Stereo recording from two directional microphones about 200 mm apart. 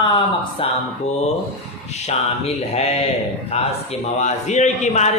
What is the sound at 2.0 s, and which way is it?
A man's voice, 30° left (ahead or behind).